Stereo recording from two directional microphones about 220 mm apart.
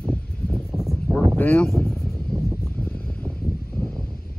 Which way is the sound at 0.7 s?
15° right (ahead or behind).